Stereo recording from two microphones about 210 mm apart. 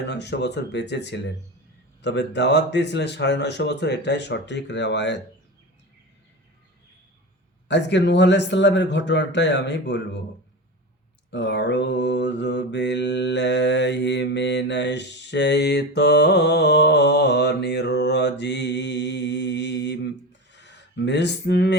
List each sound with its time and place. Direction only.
0.0 s mantra: 55° left (ahead or behind)
7.7 s mantra: 55° left (ahead or behind)
11.3 s mantra: 55° left (ahead or behind)
20.5 s gasp: 55° left (ahead or behind)